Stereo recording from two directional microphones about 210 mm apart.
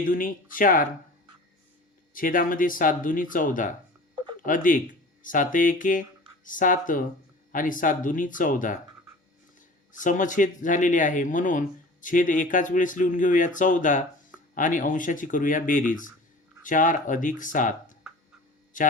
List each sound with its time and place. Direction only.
0.0 s speech: 40° left (ahead or behind)
2.1 s speech: 40° left (ahead or behind)
10.0 s speech: 40° left (ahead or behind)